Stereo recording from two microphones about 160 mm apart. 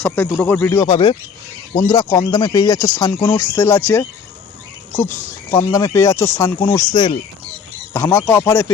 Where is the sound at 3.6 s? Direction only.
15° left (ahead or behind).